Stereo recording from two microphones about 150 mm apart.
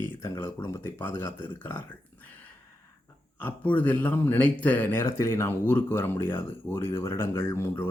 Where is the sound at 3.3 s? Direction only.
10° left (ahead or behind).